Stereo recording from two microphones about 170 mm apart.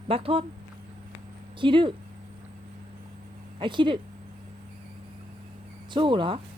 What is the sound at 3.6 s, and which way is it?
Speech, 30° right (ahead or behind).